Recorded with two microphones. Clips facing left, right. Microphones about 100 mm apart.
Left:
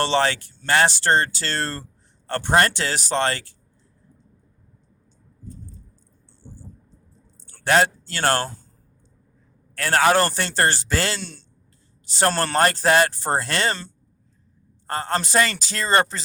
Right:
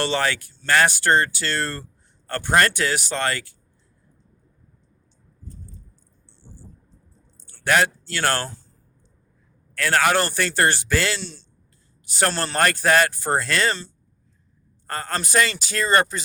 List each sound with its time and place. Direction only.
0.0 s speech: 30° left (ahead or behind)
7.6 s speech: 30° left (ahead or behind)
8.4 s speech: 45° left (ahead or behind)
9.7 s speech: 30° left (ahead or behind)
11.2 s speech: 50° left (ahead or behind)
12.5 s speech: 30° left (ahead or behind)
14.8 s speech: 25° left (ahead or behind)